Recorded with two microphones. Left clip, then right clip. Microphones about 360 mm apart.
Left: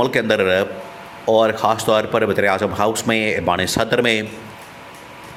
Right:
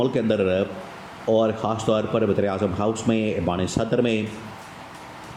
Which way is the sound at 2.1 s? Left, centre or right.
Left.